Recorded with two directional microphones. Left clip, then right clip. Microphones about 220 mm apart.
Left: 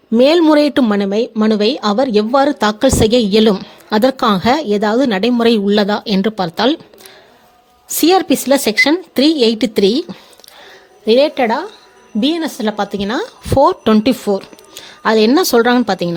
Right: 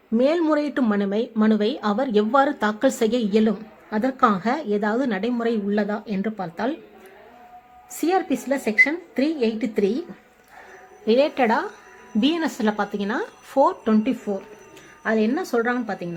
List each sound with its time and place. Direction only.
0.1 s speech: 35° left (ahead or behind)
8.0 s a woman's voice: 45° left (ahead or behind)
11.0 s a woman's voice: 25° left (ahead or behind); by 16.0 s 45° left (ahead or behind)